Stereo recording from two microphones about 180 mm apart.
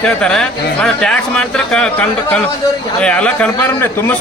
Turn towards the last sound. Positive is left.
turn(degrees=10)  # may be behind; listen again after turning